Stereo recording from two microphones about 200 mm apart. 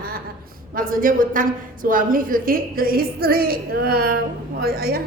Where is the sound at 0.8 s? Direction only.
45° right (ahead or behind).